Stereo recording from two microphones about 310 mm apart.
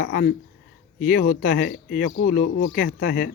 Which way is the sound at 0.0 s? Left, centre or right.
Left.